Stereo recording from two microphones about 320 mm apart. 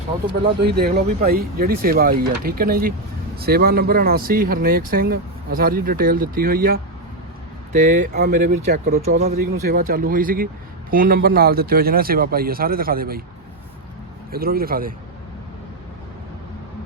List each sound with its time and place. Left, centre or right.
0.8 s speech: right
14.3 s speech: right